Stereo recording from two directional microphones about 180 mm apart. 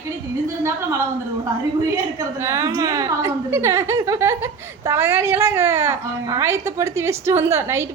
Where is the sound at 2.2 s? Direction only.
15° right (ahead or behind).